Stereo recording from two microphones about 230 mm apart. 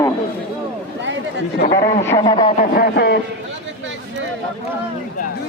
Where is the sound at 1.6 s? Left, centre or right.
Left.